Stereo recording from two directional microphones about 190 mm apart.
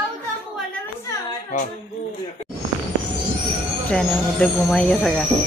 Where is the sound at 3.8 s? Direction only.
5° left (ahead or behind).